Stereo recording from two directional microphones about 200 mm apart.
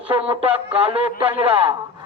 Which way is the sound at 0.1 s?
30° right (ahead or behind).